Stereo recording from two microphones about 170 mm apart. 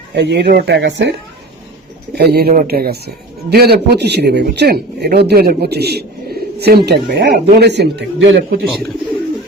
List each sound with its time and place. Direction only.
0.2 s a man's voice: 80° right
2.1 s a man's voice: 70° right (ahead or behind); by 8.5 s 90° right